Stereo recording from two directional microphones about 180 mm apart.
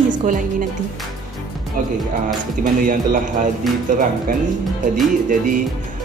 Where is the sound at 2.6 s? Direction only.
50° right (ahead or behind).